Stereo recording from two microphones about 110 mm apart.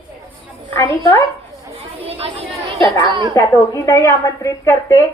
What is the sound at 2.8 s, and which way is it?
Speech, 45° right (ahead or behind).